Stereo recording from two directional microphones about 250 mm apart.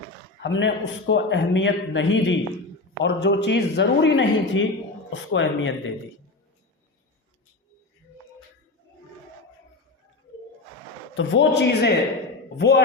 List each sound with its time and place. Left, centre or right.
0.4 s a man's voice: left
11.1 s a man's voice: left